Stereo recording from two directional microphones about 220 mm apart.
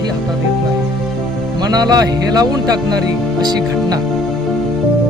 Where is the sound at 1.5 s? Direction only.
20° right (ahead or behind).